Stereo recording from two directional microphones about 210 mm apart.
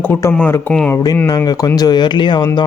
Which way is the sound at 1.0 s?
15° left (ahead or behind).